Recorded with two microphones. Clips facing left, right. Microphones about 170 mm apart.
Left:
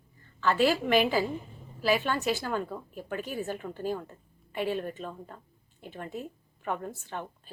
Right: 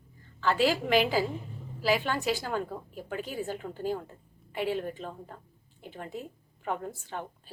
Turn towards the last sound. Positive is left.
turn(degrees=-10)  # may be behind; listen again after turning